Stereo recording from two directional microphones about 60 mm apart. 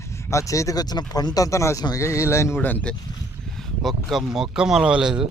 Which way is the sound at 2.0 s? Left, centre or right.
Left.